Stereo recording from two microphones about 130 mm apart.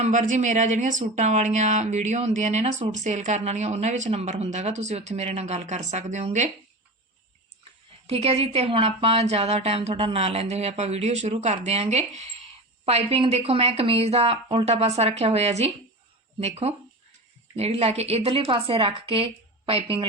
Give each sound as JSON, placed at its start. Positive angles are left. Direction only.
{"t": 0.0, "sound": "speech", "side_deg": -70}
{"t": 8.0, "sound": "a woman's voice", "side_deg": -50}